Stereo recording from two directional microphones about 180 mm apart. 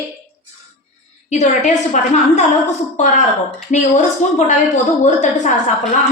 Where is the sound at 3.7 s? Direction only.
40° left (ahead or behind).